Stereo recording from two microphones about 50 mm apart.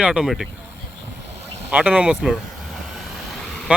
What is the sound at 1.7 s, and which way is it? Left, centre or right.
Speech, right.